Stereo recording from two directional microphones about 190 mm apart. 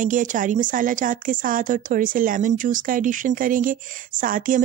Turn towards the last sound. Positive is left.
turn(degrees=-45)  # may be behind; listen again after turning